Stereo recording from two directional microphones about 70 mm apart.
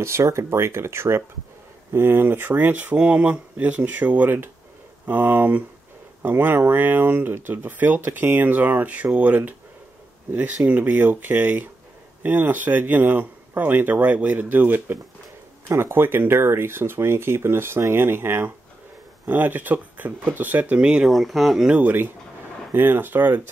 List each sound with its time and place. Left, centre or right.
0.0 s speech: right; by 21.1 s centre
21.1 s speech: centre
21.6 s speech: right